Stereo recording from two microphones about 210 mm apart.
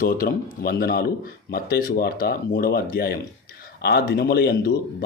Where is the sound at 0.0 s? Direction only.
45° left (ahead or behind).